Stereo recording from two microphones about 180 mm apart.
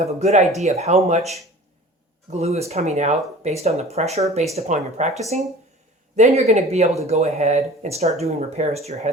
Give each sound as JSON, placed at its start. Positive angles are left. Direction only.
{"t": 0.0, "sound": "speech", "side_deg": -40}
{"t": 2.3, "sound": "speech", "side_deg": -35}